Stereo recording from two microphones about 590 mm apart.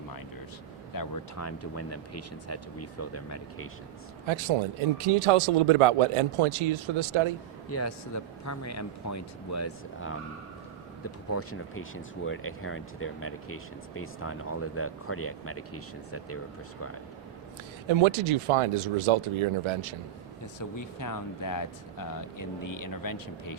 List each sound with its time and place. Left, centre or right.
0.9 s speech: left
4.3 s speech: right
7.7 s speech: left
11.3 s speech: left
17.8 s speech: right
20.6 s speech: left